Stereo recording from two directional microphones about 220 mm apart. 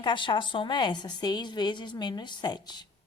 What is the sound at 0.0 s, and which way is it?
A woman's voice, 20° left (ahead or behind).